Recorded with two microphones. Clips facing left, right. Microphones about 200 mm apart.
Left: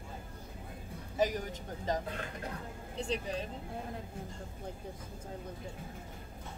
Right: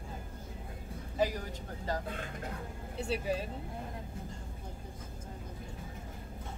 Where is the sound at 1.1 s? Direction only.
20° left (ahead or behind).